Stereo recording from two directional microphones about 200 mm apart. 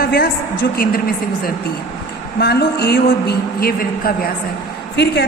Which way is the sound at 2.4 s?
55° left (ahead or behind).